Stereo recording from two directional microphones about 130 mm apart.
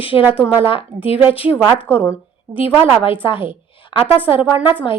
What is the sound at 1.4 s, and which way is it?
Speech, 45° left (ahead or behind).